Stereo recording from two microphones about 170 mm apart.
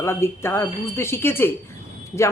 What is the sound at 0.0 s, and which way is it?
A woman's voice, 15° left (ahead or behind).